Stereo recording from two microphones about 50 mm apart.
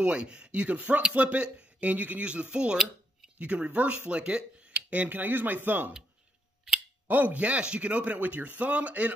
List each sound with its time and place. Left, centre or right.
0.0 s a man's voice: right
7.1 s a man's voice: right